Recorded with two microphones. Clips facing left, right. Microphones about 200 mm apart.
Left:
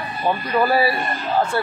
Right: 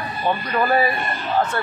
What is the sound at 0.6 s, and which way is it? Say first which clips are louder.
Speech: left 1 dB; 5° left (ahead or behind).